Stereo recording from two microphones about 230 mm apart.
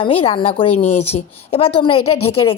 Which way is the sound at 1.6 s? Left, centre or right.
Left.